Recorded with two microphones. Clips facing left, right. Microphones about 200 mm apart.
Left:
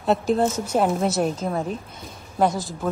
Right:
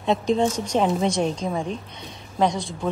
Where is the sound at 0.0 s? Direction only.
5° left (ahead or behind).